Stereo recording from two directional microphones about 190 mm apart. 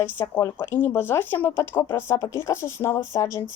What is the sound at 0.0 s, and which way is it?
Speech, 10° left (ahead or behind).